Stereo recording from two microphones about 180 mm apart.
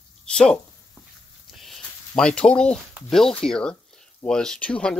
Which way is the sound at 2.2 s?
5° left (ahead or behind).